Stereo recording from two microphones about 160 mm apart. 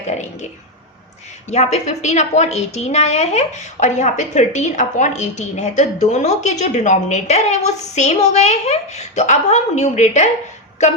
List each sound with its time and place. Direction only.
1.5 s a woman's voice: 45° left (ahead or behind)